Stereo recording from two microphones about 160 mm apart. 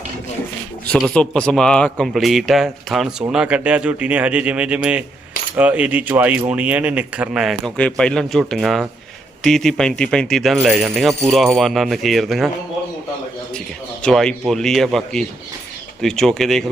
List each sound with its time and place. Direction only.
0.9 s a man's voice: 5° left (ahead or behind)
14.0 s a man's voice: 5° left (ahead or behind)